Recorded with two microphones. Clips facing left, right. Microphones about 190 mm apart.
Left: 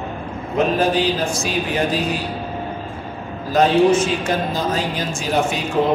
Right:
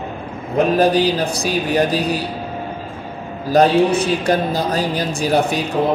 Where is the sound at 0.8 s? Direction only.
35° right (ahead or behind).